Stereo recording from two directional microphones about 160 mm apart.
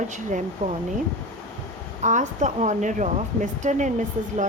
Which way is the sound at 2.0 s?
50° right (ahead or behind).